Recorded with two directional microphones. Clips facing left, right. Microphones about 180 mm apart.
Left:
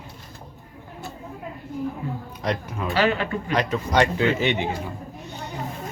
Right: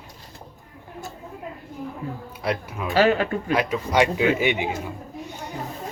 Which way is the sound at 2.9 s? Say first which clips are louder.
Right 3 dB; 45° right (ahead or behind).